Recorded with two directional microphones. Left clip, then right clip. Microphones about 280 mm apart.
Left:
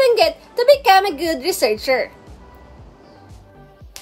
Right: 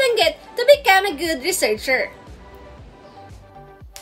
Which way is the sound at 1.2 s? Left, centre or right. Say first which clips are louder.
Left 2 dB; right.